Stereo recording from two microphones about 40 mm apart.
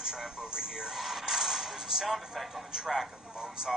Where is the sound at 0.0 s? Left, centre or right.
Centre.